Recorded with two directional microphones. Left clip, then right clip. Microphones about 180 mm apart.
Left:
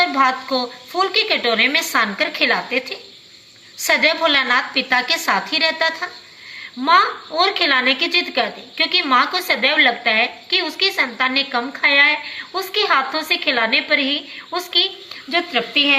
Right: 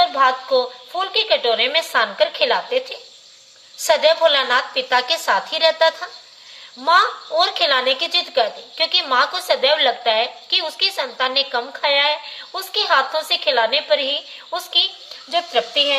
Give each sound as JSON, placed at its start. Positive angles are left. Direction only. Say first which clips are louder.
{"t": 0.0, "sound": "a woman's voice", "louder": "even", "side_deg": -55}